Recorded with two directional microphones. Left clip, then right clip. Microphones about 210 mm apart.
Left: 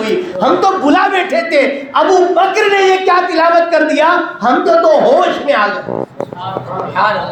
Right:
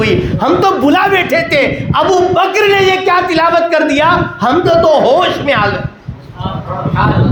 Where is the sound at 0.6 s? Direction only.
45° right (ahead or behind).